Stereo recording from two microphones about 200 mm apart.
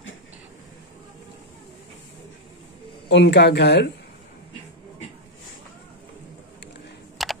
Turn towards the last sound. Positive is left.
turn(degrees=0)  # may be behind; listen again after turning